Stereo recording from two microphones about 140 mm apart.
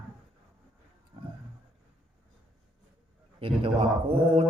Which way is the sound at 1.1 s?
40° right (ahead or behind).